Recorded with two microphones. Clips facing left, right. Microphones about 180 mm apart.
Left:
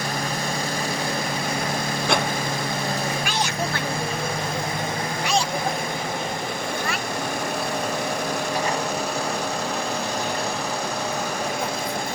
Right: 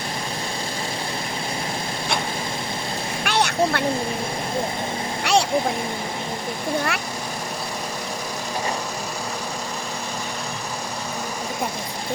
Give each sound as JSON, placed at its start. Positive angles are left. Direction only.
{"t": 3.2, "sound": "vehicle", "side_deg": -65}
{"t": 5.2, "sound": "vehicle", "side_deg": -70}